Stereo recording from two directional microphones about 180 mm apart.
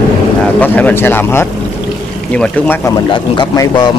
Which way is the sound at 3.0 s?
25° left (ahead or behind).